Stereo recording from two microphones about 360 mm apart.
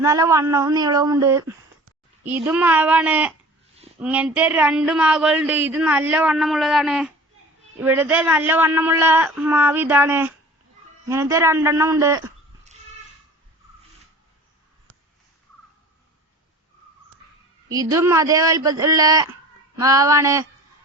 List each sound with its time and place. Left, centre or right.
0.0 s speech: centre
3.8 s a sound: centre
4.0 s speech: centre
17.7 s speech: centre